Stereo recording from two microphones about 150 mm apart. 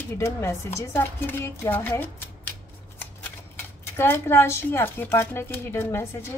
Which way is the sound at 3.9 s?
15° left (ahead or behind).